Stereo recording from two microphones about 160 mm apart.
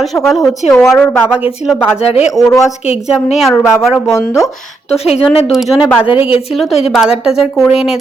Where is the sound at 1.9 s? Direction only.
40° left (ahead or behind).